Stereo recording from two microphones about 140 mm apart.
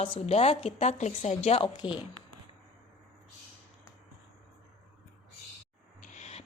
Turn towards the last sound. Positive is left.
turn(degrees=55)  # may be behind; listen again after turning